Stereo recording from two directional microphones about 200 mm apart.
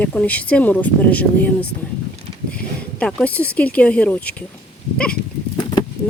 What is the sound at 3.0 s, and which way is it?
Speech, 5° left (ahead or behind).